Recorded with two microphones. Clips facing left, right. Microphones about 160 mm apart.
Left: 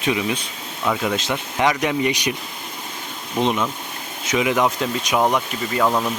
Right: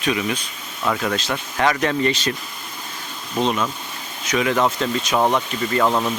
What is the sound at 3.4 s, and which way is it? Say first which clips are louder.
Speech: even; 20° left (ahead or behind).